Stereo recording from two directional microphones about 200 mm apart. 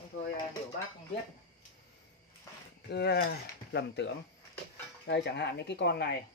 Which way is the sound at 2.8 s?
55° left (ahead or behind).